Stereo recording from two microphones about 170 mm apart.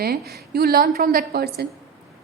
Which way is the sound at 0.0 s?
65° right (ahead or behind).